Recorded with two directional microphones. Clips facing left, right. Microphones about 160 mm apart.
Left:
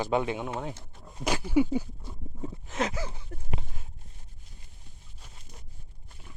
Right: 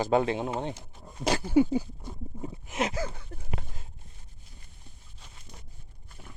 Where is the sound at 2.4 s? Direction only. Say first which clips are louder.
Even; 20° right (ahead or behind).